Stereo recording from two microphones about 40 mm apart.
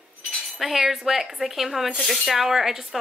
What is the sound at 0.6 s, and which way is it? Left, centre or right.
A woman's voice, centre.